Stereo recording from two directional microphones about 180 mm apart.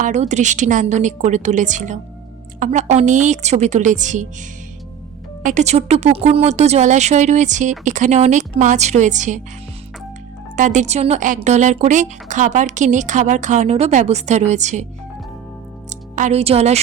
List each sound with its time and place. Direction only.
0.0 s a woman's voice: 40° right (ahead or behind)
5.4 s speech: 45° right (ahead or behind)
10.5 s speech: 45° right (ahead or behind)
16.1 s speech: 40° right (ahead or behind)